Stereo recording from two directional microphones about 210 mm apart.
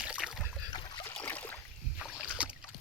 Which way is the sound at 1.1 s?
10° left (ahead or behind).